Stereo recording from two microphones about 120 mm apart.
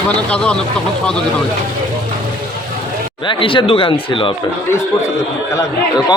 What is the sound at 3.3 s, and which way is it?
Speech, 45° left (ahead or behind).